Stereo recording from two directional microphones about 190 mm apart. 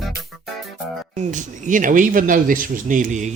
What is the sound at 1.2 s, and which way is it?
A man's voice, 40° right (ahead or behind).